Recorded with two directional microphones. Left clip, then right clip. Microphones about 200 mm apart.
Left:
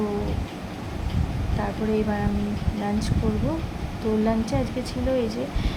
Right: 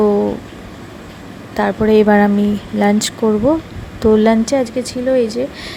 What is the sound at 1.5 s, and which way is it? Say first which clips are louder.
Speech: right 14 dB; 45° right (ahead or behind).